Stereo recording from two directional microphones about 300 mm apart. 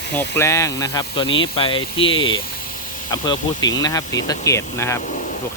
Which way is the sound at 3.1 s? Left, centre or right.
Centre.